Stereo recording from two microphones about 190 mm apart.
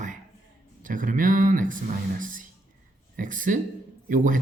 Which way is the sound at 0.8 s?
45° right (ahead or behind).